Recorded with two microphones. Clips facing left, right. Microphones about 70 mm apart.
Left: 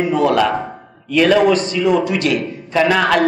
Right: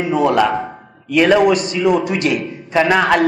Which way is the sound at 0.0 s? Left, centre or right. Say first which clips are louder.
Even; centre.